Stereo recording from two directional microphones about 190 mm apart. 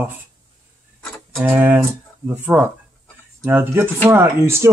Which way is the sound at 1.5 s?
10° right (ahead or behind).